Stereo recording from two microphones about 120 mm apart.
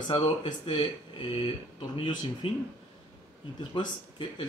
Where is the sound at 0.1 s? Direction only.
40° left (ahead or behind).